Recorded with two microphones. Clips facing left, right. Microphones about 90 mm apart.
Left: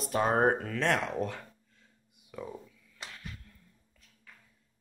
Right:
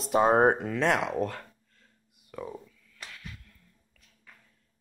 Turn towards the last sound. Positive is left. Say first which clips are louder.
# even
turn(degrees=25)  # may be behind; listen again after turning